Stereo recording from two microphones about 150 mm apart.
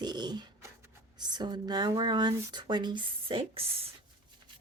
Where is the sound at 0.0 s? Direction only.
30° right (ahead or behind).